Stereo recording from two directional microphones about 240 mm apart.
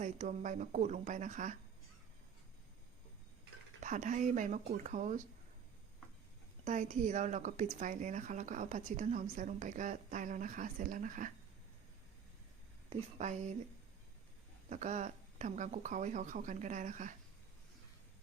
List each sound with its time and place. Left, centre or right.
0.0 s speech: right
3.8 s speech: right
6.7 s speech: right
12.9 s speech: right
14.7 s speech: right